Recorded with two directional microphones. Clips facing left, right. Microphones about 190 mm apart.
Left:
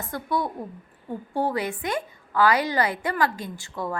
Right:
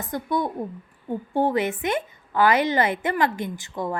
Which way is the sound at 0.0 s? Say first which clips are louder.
Right 2 dB; 20° right (ahead or behind).